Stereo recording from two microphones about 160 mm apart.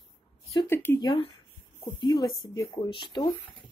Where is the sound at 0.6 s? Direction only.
15° left (ahead or behind).